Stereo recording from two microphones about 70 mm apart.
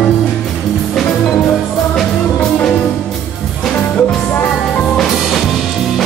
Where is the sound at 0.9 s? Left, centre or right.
Centre.